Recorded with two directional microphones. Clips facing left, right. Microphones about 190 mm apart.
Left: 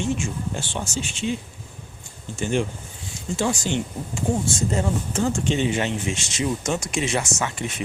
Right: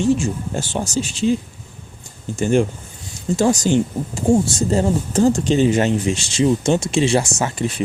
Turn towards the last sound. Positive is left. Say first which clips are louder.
# right 5 dB
turn(degrees=-35)  # may be behind; listen again after turning